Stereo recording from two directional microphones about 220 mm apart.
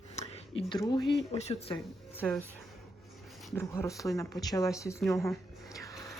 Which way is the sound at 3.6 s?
15° left (ahead or behind).